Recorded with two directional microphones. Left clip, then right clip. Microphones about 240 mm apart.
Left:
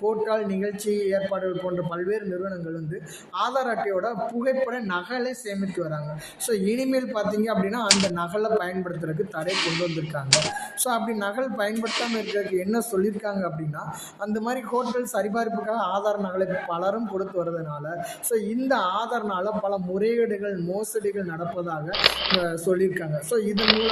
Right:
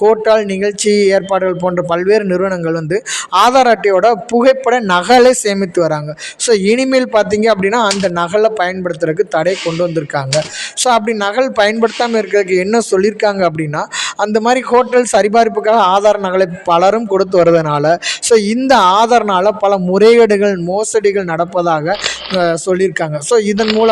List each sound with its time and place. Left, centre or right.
0.0 s speech: right
7.9 s speech: centre
8.1 s speech: right
10.8 s speech: right
23.6 s speech: centre